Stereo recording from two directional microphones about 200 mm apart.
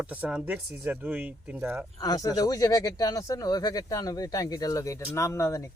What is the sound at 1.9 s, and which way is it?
Speech, 20° left (ahead or behind).